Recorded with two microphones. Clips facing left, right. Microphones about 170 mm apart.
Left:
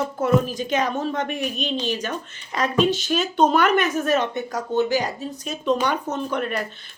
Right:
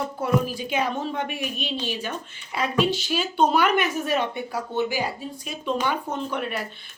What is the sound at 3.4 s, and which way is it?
Speech, 45° left (ahead or behind).